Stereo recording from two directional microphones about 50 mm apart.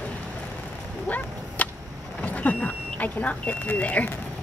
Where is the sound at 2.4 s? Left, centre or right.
Left.